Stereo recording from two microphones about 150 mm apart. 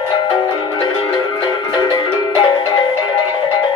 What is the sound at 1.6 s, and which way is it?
Music, 30° left (ahead or behind).